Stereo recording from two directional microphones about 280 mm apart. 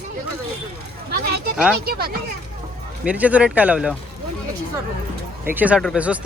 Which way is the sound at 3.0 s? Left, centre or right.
Centre.